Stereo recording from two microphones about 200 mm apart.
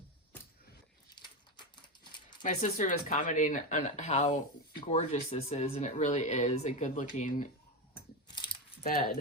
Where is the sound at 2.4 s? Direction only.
40° left (ahead or behind).